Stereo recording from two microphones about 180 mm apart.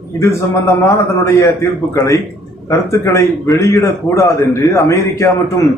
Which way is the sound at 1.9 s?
20° left (ahead or behind).